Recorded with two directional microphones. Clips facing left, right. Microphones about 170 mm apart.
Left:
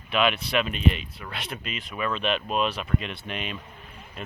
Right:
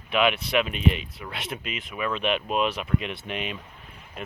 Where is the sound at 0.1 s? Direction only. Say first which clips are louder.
Right 1 dB; 15° right (ahead or behind).